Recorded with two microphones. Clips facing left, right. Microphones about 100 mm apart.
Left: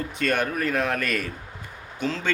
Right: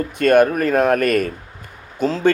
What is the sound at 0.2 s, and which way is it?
Speech, 50° right (ahead or behind).